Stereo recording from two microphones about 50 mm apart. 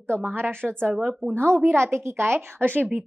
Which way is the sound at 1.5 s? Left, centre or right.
Right.